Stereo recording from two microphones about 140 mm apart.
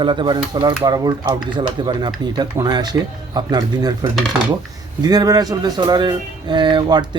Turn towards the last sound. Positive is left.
turn(degrees=-30)  # may be behind; listen again after turning